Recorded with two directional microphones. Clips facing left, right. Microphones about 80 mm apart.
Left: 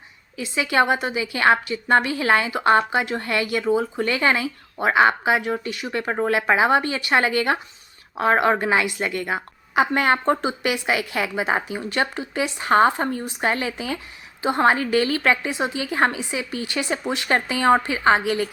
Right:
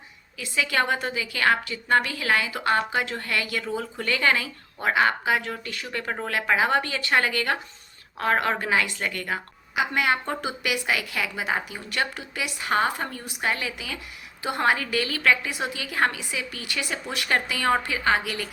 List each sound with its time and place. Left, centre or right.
0.3 s a woman's voice: left
9.7 s a woman's voice: left
10.4 s a woman's voice: left